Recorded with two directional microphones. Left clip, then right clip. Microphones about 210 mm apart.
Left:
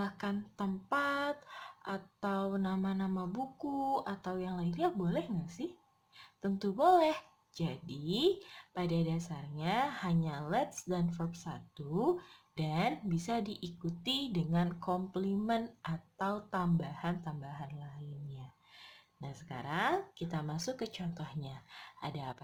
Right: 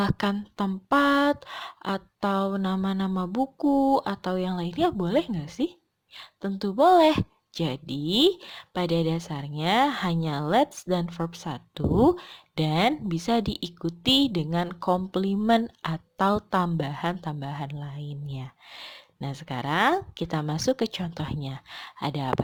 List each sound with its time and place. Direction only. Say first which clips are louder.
0.0 s a woman's voice: right 12 dB; 40° right (ahead or behind)
3.6 s speech: right 14 dB; 60° right (ahead or behind)
4.0 s a woman's voice: right 11 dB; 40° right (ahead or behind)